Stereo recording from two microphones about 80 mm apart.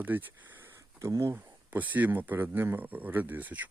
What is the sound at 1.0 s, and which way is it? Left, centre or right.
Speech, right.